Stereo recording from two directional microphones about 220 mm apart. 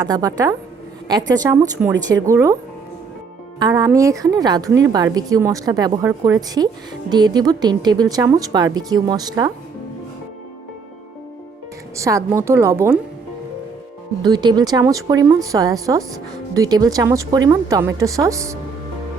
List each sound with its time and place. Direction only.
0.1 s speech: 15° right (ahead or behind)
3.6 s speech: 15° right (ahead or behind)
11.9 s speech: 15° right (ahead or behind)
14.2 s speech: 20° right (ahead or behind)